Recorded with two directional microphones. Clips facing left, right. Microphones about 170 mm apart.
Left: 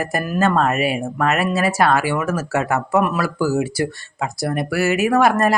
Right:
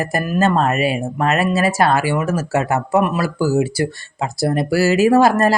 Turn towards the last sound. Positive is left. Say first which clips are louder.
# right 3 dB
turn(degrees=-30)  # may be behind; listen again after turning